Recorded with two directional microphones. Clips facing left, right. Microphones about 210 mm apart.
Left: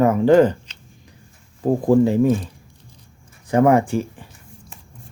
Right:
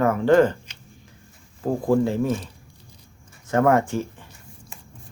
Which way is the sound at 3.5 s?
15° left (ahead or behind).